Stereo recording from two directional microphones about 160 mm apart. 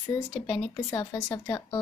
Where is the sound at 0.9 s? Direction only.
25° left (ahead or behind).